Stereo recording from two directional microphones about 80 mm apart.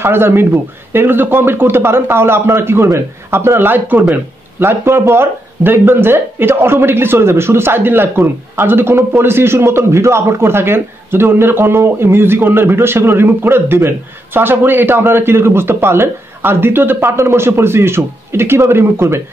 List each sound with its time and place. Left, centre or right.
0.0 s speech: right